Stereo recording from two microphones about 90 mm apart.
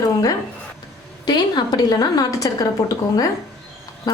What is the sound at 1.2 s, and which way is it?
A woman's voice, 50° left (ahead or behind).